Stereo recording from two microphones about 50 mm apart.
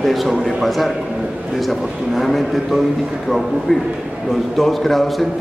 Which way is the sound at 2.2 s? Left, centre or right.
Centre.